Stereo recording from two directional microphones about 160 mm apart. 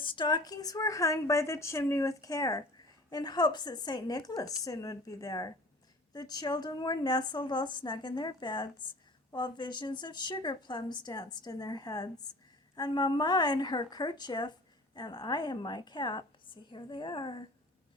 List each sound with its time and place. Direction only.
0.0 s a woman's voice: 30° left (ahead or behind)